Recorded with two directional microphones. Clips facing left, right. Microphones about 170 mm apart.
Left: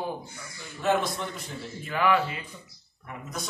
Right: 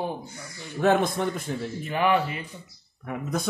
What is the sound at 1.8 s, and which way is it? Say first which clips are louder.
Speech: right 1 dB; 20° right (ahead or behind).